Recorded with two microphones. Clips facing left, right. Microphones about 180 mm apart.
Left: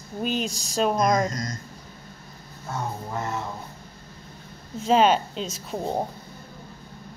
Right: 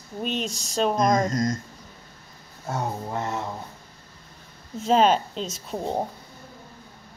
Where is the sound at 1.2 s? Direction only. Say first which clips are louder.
Right 6 dB; 45° right (ahead or behind).